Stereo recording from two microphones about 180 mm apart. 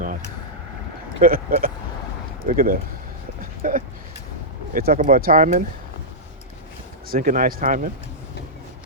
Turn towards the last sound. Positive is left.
turn(degrees=-50)  # may be behind; listen again after turning